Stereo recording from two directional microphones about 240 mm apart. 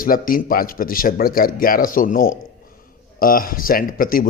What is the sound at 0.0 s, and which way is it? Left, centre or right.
Speech, left.